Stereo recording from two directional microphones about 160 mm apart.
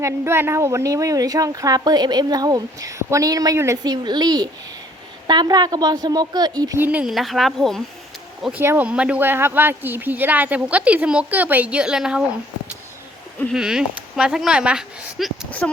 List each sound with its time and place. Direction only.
0.0 s speech: 15° right (ahead or behind)
6.8 s speech: 5° right (ahead or behind)
13.5 s speech: 5° right (ahead or behind)
15.4 s speech: 10° left (ahead or behind)